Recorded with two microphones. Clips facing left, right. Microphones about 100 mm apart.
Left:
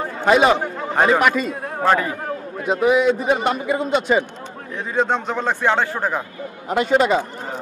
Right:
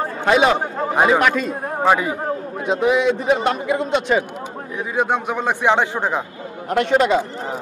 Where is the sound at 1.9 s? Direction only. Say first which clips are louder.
Right 1 dB; 15° right (ahead or behind).